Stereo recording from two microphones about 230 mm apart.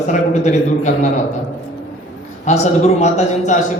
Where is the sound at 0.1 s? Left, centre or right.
Left.